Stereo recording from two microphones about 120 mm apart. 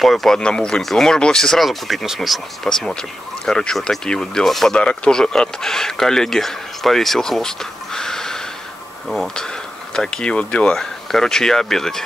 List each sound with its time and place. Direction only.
0.0 s speech: centre (ahead or behind)